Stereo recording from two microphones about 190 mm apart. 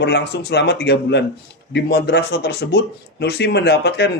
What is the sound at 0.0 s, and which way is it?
Speech, 65° left (ahead or behind).